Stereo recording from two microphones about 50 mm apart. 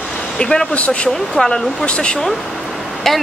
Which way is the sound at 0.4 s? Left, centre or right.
Centre.